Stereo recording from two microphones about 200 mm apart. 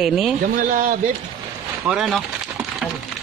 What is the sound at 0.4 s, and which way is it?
Speech, 40° right (ahead or behind).